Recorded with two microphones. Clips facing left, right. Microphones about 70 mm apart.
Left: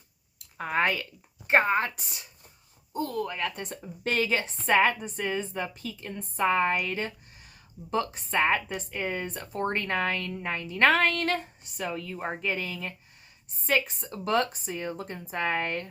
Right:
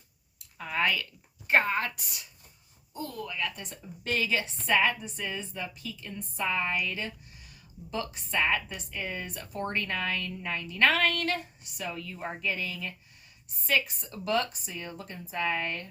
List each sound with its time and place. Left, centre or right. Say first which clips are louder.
0.3 s a woman's voice: left 4 dB; left
2.9 s a woman's voice: left 6 dB; left